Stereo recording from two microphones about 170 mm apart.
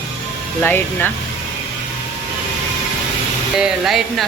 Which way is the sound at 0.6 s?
10° left (ahead or behind).